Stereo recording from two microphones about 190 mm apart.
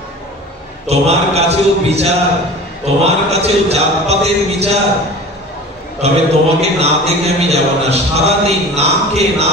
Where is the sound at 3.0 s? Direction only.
35° right (ahead or behind).